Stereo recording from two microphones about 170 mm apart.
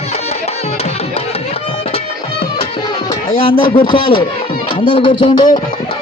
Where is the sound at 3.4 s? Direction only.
30° left (ahead or behind).